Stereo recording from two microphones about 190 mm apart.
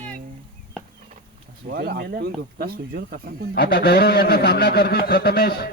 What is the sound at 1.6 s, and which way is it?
Speech, 55° right (ahead or behind).